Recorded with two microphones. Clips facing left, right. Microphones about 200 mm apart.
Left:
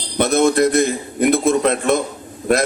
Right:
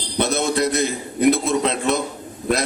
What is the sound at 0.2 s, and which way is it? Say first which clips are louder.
A man's voice: left 6 dB; 50° left (ahead or behind).